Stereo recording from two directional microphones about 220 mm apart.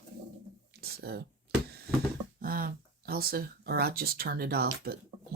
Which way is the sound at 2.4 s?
40° right (ahead or behind).